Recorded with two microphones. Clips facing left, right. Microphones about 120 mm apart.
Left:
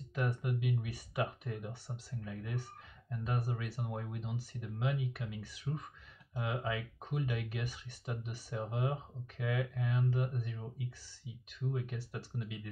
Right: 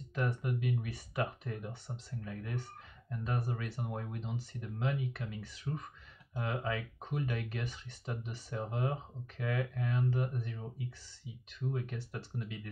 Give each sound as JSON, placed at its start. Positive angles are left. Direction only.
{"t": 0.1, "sound": "speech", "side_deg": 10}
{"t": 11.7, "sound": "speech", "side_deg": 10}